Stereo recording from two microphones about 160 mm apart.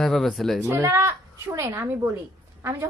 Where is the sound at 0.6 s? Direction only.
15° right (ahead or behind).